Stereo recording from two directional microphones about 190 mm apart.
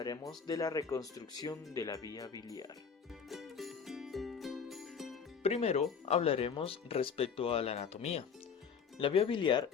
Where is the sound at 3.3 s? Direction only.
Centre (ahead or behind).